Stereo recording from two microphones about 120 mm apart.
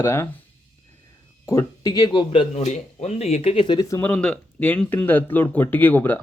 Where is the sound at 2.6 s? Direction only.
70° left (ahead or behind); by 3.8 s 45° left (ahead or behind).